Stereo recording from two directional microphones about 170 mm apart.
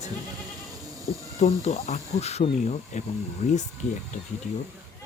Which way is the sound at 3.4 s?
45° left (ahead or behind).